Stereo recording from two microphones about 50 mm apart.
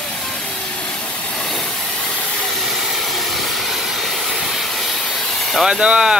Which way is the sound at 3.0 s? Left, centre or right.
Centre.